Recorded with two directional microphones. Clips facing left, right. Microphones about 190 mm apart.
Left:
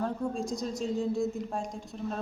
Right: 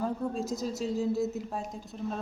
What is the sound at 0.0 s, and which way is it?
A woman's voice, 5° right (ahead or behind).